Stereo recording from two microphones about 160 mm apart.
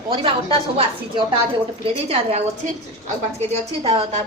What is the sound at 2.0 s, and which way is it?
Speech, 40° right (ahead or behind).